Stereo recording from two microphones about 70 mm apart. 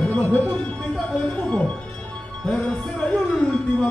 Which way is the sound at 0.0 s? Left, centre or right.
Left.